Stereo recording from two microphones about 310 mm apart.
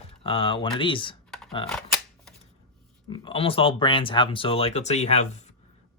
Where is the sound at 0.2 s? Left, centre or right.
Centre.